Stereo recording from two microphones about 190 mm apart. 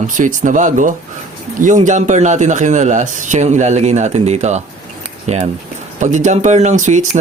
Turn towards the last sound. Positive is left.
turn(degrees=-40)  # may be behind; listen again after turning